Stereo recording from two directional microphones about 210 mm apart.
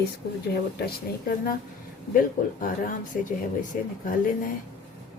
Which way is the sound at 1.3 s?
45° left (ahead or behind).